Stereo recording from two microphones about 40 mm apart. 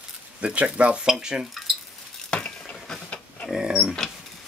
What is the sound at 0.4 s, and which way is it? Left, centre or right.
Speech, right.